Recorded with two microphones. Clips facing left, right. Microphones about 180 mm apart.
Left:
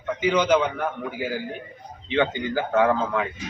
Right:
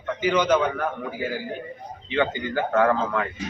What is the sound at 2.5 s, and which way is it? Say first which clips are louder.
Speech: even; 5° left (ahead or behind).